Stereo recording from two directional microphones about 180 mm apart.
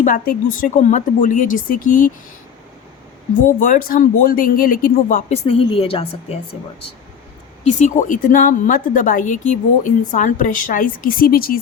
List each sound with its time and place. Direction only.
0.0 s a woman's voice: 50° left (ahead or behind)
3.6 s a woman's voice: 50° left (ahead or behind)
5.5 s a woman's voice: 30° left (ahead or behind)
7.7 s a woman's voice: 40° left (ahead or behind)